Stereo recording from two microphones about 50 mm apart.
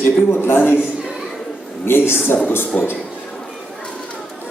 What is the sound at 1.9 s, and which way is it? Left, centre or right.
A man's voice, left.